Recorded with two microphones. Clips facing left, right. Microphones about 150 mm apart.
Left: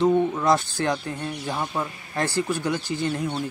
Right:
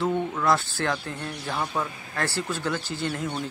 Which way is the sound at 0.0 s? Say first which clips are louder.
Left 5 dB; 20° left (ahead or behind).